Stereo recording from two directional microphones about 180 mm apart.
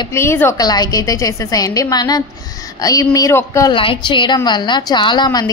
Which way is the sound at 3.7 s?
30° left (ahead or behind).